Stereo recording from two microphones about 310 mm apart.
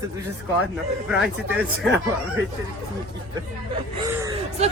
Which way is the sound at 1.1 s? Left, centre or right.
Centre.